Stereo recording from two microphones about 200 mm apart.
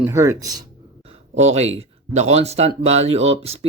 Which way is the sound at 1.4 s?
35° right (ahead or behind).